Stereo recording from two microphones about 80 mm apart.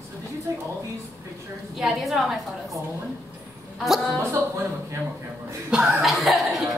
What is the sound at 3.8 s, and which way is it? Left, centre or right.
Speech, centre.